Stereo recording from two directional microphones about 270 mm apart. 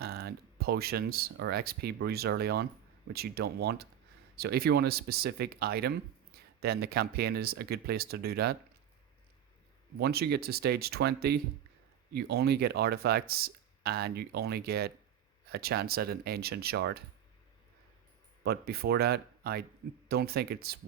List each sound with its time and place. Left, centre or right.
0.0 s speech: right
10.0 s speech: right
18.4 s speech: right